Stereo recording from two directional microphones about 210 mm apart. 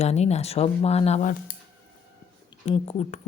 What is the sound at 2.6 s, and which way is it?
Speech, 30° left (ahead or behind).